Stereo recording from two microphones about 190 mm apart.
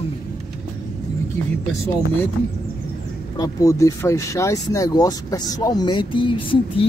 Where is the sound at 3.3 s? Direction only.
20° left (ahead or behind).